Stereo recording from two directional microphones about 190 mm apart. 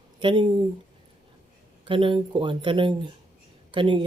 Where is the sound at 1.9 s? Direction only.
25° right (ahead or behind).